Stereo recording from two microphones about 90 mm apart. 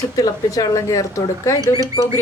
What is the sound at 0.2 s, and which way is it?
Speech, 40° left (ahead or behind).